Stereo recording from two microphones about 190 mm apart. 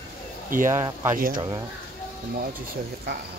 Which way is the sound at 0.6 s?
15° right (ahead or behind).